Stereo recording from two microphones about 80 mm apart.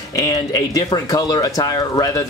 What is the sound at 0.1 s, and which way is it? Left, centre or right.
Speech, left.